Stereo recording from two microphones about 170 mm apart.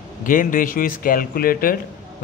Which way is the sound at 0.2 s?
55° left (ahead or behind).